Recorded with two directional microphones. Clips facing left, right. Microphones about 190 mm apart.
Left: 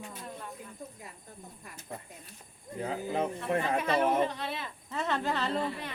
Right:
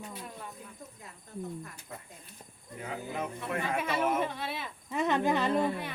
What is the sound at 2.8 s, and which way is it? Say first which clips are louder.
Speech: left 5 dB; 30° left (ahead or behind).